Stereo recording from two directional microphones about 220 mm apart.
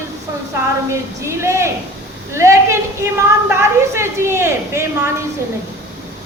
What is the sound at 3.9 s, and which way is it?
Speech, 10° right (ahead or behind).